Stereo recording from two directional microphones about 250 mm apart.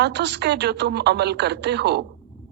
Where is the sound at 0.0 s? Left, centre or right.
Right.